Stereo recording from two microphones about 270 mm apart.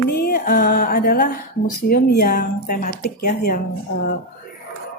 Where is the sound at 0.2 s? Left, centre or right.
Left.